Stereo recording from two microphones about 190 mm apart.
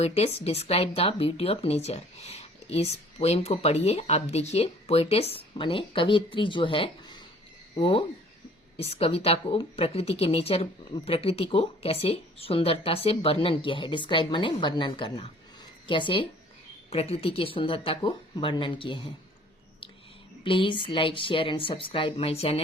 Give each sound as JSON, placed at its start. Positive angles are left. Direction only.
{"t": 0.0, "sound": "a woman's voice", "side_deg": 35}
{"t": 20.4, "sound": "a woman's voice", "side_deg": 25}